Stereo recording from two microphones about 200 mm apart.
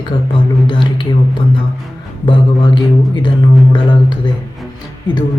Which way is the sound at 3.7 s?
20° left (ahead or behind).